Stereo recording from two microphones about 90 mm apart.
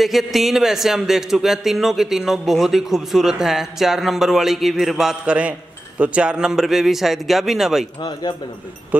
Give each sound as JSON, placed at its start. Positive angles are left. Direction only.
{"t": 0.0, "sound": "speech", "side_deg": 0}
{"t": 8.0, "sound": "speech", "side_deg": 50}